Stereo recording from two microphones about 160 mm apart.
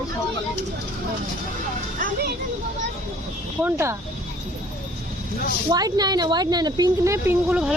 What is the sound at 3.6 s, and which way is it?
Speech, 15° right (ahead or behind).